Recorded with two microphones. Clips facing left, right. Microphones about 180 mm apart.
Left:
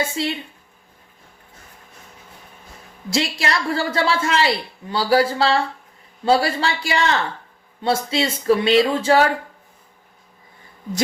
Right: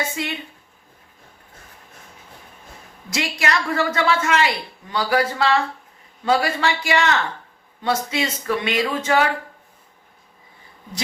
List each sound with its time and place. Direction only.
0.2 s speech: 30° left (ahead or behind)
3.1 s a woman's voice: 30° left (ahead or behind)